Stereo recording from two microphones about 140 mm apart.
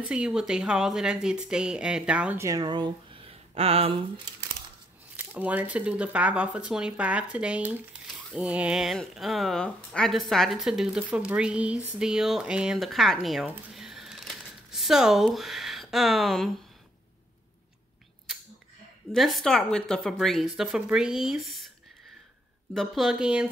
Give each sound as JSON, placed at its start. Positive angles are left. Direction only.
{"t": 0.1, "sound": "speech", "side_deg": -5}
{"t": 2.4, "sound": "speech", "side_deg": -25}
{"t": 5.1, "sound": "speech", "side_deg": -10}
{"t": 19.1, "sound": "speech", "side_deg": 0}
{"t": 22.8, "sound": "speech", "side_deg": 0}